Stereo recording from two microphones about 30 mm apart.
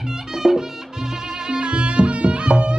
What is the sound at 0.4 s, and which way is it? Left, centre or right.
Music, right.